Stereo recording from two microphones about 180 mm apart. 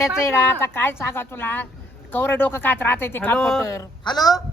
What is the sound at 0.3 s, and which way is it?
Speech, 15° left (ahead or behind).